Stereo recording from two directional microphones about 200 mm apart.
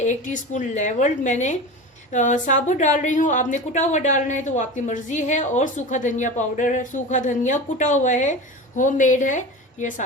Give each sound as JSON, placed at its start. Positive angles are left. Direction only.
{"t": 0.0, "sound": "a woman's voice", "side_deg": 35}